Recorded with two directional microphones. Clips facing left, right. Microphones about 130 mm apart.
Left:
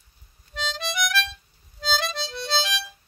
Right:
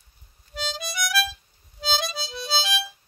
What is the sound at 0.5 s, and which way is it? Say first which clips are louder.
Music: left 2 dB; 10° right (ahead or behind).